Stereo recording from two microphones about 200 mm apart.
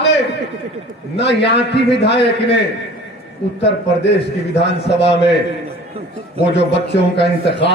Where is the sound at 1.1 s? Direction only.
60° left (ahead or behind).